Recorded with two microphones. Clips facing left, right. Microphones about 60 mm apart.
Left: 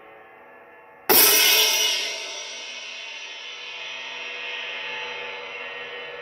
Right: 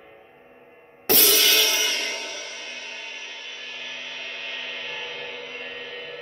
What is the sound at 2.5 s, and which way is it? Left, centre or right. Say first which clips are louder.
Music: right 1 dB; centre.